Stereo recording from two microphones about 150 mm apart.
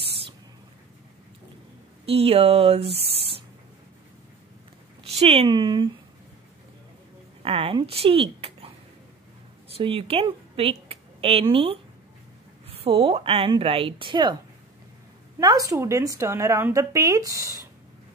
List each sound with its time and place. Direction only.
2.0 s a woman's voice: 40° right (ahead or behind)
5.0 s a sound: 45° right (ahead or behind)
5.5 s speech: 30° right (ahead or behind)
7.4 s a woman's voice: 40° right (ahead or behind)
9.8 s a woman's voice: 40° right (ahead or behind)
15.3 s speech: 25° right (ahead or behind)